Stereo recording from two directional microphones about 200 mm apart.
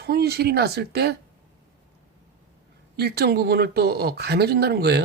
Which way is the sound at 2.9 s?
55° right (ahead or behind).